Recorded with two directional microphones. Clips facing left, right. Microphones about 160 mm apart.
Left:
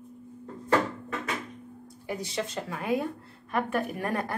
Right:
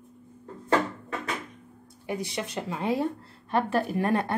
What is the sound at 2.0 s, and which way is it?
Speech, 15° right (ahead or behind).